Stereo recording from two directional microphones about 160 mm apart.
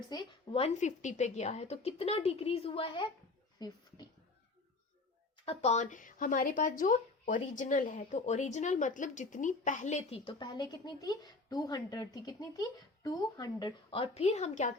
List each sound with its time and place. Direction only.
0.1 s speech: 25° left (ahead or behind)
0.6 s speech: 45° left (ahead or behind); by 4.1 s 25° left (ahead or behind)
5.5 s speech: 45° left (ahead or behind)
10.3 s speech: 25° left (ahead or behind); by 14.7 s 45° left (ahead or behind)